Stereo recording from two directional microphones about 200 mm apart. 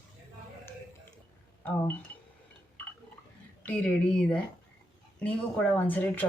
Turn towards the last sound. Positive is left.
turn(degrees=10)  # may be behind; listen again after turning